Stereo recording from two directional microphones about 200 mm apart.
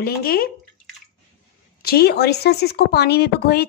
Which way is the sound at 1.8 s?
50° left (ahead or behind).